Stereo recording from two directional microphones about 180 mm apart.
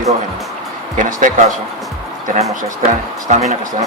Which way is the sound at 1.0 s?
45° right (ahead or behind).